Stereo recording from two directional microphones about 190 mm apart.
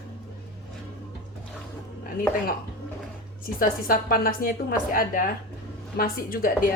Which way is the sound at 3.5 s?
50° left (ahead or behind).